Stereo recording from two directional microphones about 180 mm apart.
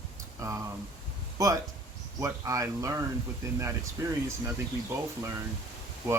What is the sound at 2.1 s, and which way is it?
Speech, 15° right (ahead or behind).